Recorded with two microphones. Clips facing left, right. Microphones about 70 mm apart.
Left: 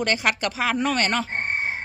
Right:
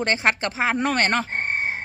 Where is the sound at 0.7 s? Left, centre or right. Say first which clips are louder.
Right 1 dB; right.